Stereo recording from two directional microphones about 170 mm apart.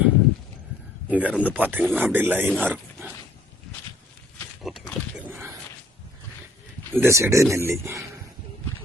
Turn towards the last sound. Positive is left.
turn(degrees=-15)  # may be behind; listen again after turning